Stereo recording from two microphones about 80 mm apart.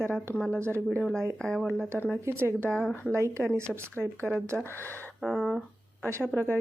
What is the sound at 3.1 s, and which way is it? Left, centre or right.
Speech, right.